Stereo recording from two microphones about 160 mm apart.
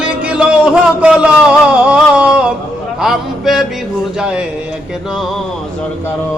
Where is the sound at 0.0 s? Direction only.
10° right (ahead or behind).